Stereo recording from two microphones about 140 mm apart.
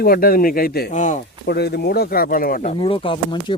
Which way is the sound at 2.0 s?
90° left.